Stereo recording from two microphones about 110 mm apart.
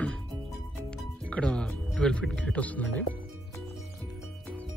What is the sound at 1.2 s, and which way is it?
Music, 10° left (ahead or behind).